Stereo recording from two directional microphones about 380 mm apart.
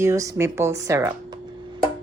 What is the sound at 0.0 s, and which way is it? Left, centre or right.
Speech, centre.